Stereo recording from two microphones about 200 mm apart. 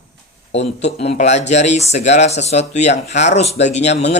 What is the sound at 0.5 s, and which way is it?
Speech, 35° left (ahead or behind).